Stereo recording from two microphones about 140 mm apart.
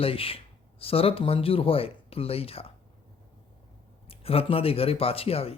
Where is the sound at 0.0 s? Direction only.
40° left (ahead or behind).